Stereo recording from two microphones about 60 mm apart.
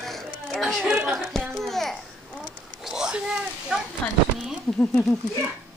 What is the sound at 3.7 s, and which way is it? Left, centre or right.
Speech, centre.